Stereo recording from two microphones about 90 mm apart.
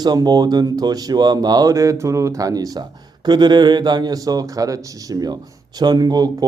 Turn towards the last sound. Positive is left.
turn(degrees=-45)  # may be behind; listen again after turning